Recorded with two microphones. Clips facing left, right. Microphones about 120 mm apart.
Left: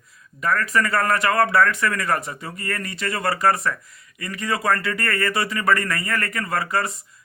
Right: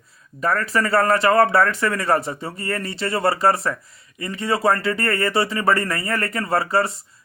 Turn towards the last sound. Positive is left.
turn(degrees=-30)  # may be behind; listen again after turning